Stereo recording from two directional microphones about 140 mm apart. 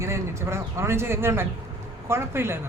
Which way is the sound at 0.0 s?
20° right (ahead or behind).